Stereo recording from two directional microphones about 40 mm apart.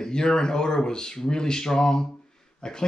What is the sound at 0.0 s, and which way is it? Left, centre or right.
Speech, centre.